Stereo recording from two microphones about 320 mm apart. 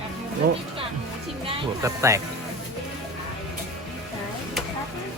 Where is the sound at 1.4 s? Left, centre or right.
Centre.